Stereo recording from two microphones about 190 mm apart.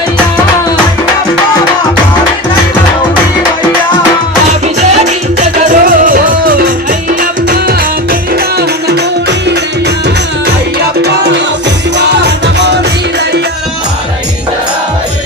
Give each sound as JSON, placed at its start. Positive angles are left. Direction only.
{"t": 4.5, "sound": "music", "side_deg": -35}
{"t": 11.0, "sound": "music", "side_deg": -65}